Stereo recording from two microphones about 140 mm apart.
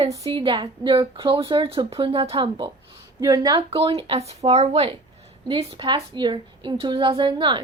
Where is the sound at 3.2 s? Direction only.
25° right (ahead or behind).